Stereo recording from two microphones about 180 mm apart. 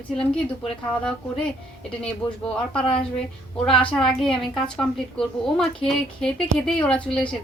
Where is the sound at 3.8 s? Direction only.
30° left (ahead or behind).